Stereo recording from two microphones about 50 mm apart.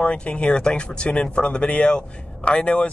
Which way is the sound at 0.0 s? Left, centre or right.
Left.